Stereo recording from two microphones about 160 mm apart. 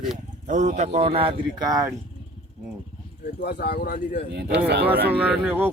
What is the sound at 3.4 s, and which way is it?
Speech, 90° left.